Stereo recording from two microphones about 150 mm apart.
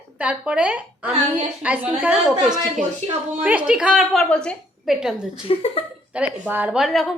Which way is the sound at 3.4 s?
10° right (ahead or behind).